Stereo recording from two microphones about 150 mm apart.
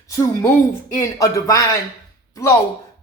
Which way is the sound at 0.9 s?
20° left (ahead or behind).